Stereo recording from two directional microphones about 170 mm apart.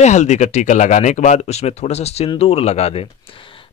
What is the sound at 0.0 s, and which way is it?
Speech, 45° left (ahead or behind).